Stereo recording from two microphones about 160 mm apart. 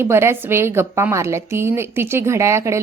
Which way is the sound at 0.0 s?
15° right (ahead or behind).